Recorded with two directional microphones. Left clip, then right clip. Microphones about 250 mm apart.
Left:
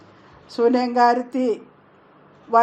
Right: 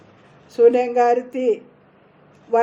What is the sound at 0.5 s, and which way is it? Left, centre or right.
A woman's voice, centre.